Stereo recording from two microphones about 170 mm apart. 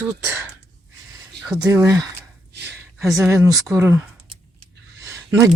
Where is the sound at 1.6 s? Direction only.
15° right (ahead or behind).